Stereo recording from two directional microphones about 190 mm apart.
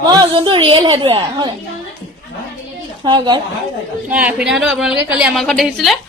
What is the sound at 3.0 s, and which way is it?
Speech, 25° right (ahead or behind).